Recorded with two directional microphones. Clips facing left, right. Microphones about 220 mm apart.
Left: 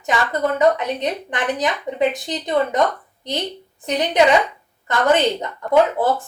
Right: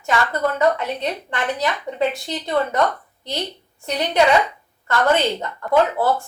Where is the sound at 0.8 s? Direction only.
15° left (ahead or behind).